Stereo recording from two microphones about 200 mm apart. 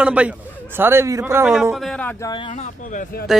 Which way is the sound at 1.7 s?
Centre (ahead or behind).